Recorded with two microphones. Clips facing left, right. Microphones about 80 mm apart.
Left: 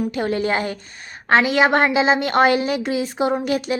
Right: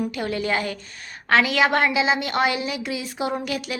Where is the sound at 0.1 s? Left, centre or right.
Left.